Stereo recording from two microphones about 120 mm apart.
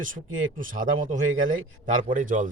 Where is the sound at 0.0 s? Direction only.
90° right.